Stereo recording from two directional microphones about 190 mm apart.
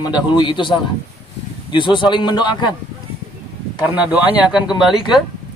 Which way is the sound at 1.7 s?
25° left (ahead or behind).